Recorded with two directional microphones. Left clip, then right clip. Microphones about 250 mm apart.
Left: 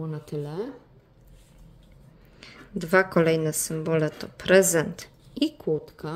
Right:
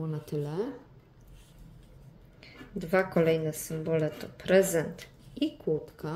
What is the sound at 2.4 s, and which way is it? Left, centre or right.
Speech, left.